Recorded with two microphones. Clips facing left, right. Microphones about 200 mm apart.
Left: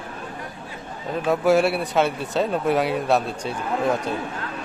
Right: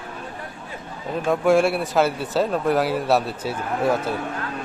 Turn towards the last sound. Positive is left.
turn(degrees=-5)  # may be behind; listen again after turning